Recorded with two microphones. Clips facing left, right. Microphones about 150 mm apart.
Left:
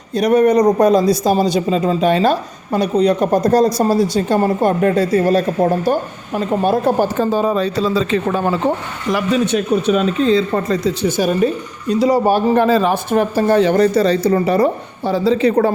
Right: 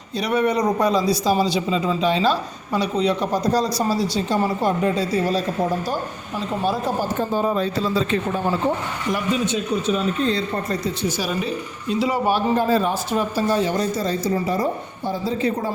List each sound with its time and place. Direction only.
0.2 s speech: 45° left (ahead or behind); by 8.5 s 90° left
9.1 s speech: 75° left (ahead or behind)
10.5 s speech: 90° left
11.2 s speech: 45° left (ahead or behind)
12.5 s speech: 90° left
13.1 s speech: 55° left (ahead or behind); by 15.7 s 70° left (ahead or behind)